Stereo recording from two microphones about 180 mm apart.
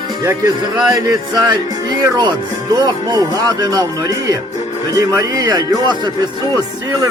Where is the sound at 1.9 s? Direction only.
20° right (ahead or behind).